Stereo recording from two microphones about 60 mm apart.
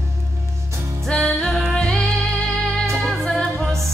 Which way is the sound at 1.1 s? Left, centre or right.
Centre.